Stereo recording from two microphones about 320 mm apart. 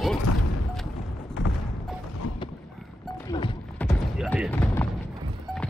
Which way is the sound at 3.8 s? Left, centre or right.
Centre.